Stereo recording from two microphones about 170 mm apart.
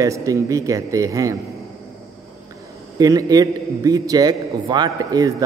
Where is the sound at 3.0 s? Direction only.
20° right (ahead or behind).